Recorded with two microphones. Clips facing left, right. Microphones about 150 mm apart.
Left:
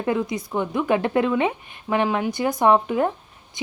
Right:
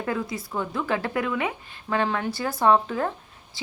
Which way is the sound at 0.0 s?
20° left (ahead or behind).